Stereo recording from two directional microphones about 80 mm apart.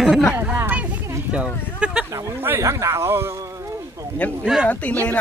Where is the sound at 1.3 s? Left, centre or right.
Centre.